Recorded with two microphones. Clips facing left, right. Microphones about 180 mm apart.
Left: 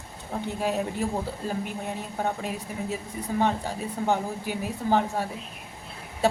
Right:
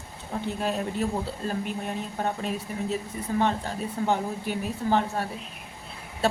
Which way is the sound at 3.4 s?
10° left (ahead or behind).